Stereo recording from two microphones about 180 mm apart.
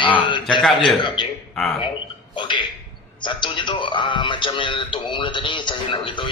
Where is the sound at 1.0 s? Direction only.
25° left (ahead or behind).